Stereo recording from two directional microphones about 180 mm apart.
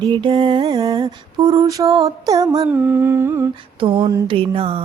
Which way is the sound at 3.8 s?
30° right (ahead or behind).